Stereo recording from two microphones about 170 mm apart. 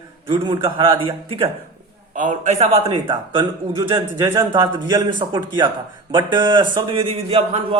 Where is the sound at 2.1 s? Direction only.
45° right (ahead or behind).